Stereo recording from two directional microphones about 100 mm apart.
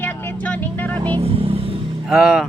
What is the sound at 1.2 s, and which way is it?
Vehicle, 75° right (ahead or behind).